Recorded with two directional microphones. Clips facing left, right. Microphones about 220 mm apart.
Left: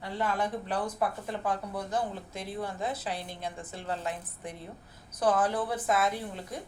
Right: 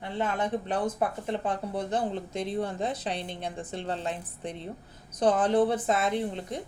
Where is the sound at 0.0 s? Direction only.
20° right (ahead or behind).